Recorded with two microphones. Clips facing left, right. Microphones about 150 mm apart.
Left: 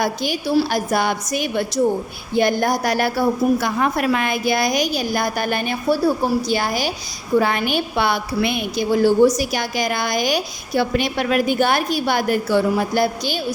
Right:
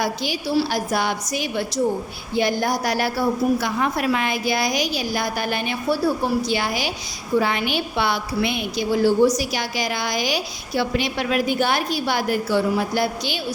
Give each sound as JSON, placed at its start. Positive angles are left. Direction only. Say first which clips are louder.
{"t": 0.0, "sound": "a woman's voice", "louder": "left 3 dB", "side_deg": 50}